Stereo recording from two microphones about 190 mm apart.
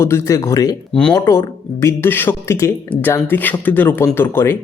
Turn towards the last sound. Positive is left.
turn(degrees=15)  # may be behind; listen again after turning